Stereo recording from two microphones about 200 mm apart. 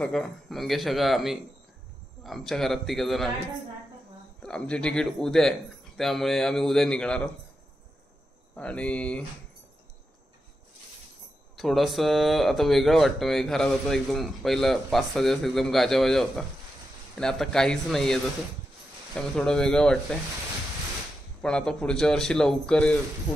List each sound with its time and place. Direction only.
0.0 s speech: centre (ahead or behind)
4.4 s speech: 5° left (ahead or behind)
8.5 s speech: 5° left (ahead or behind)
11.5 s speech: centre (ahead or behind)
21.4 s speech: 5° left (ahead or behind)